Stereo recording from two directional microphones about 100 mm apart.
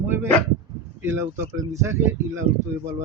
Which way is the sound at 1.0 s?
25° right (ahead or behind).